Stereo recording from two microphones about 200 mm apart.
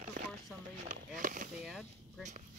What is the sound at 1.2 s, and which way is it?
Speech, 45° right (ahead or behind).